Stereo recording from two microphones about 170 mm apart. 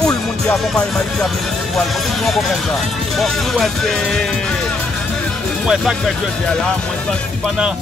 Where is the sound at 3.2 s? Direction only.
Centre (ahead or behind).